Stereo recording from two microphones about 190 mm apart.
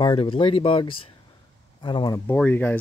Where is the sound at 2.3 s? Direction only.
10° left (ahead or behind).